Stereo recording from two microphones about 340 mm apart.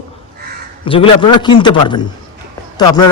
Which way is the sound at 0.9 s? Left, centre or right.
Centre.